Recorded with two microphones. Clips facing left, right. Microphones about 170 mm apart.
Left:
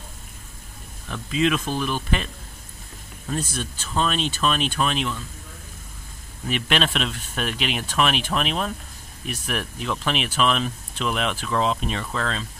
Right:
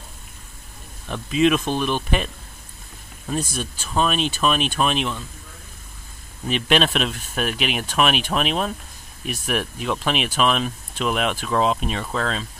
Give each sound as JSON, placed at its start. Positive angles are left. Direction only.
{"t": 1.0, "sound": "speech", "side_deg": -20}
{"t": 3.3, "sound": "speech", "side_deg": -15}
{"t": 6.5, "sound": "speech", "side_deg": -15}